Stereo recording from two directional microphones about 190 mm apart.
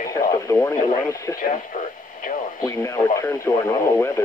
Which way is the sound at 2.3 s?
45° left (ahead or behind).